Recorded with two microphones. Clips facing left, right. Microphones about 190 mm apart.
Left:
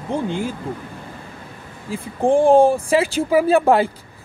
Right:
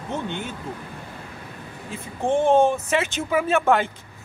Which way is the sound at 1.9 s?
30° left (ahead or behind).